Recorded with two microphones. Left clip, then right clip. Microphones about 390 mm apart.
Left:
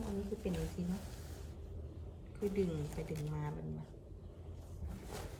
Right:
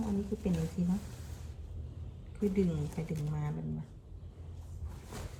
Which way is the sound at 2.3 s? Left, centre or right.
Centre.